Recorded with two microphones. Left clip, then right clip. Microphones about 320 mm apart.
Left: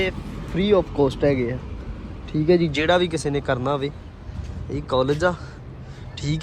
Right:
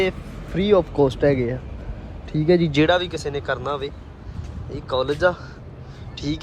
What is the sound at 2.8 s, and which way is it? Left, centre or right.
Speech, centre.